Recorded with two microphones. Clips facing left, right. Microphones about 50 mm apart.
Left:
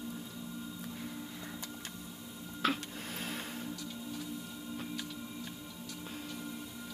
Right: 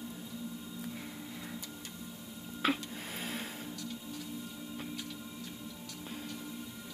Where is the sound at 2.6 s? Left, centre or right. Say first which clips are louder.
Right 1 dB; centre.